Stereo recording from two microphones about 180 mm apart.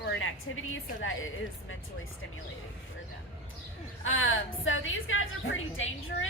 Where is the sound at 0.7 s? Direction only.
90° left.